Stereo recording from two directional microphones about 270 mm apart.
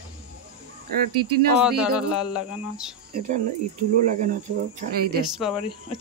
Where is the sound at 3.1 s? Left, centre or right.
Right.